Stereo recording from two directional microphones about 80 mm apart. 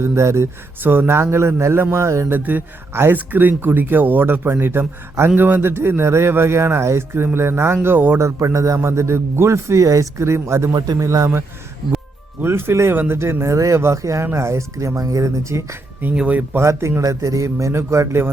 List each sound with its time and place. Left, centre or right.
0.0 s a man's voice: right
2.3 s a man's voice: right
8.2 s a man's voice: right
10.7 s a man's voice: right
10.9 s speech: right
12.4 s a man's voice: right
16.1 s speech: centre
16.6 s a man's voice: right